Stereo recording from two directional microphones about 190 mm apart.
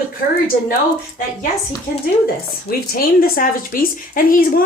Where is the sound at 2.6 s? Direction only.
50° left (ahead or behind).